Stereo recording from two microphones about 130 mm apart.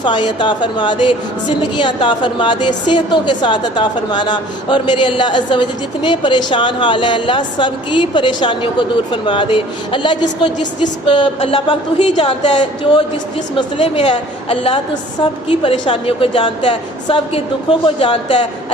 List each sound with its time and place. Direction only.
0.0 s a woman's voice: 35° left (ahead or behind); by 12.2 s 60° left (ahead or behind)
12.2 s a woman's voice: 40° left (ahead or behind)